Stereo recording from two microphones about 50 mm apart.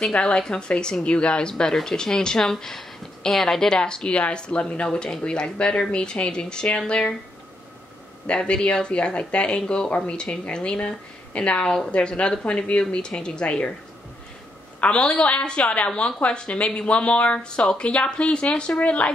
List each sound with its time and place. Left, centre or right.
0.1 s speech: left
1.5 s speech: centre
8.3 s speech: centre
14.8 s speech: left